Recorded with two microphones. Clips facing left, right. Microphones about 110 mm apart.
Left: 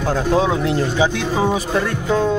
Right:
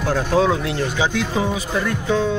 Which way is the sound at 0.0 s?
20° left (ahead or behind).